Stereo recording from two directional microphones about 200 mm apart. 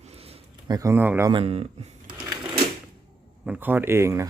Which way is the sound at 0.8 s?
10° right (ahead or behind).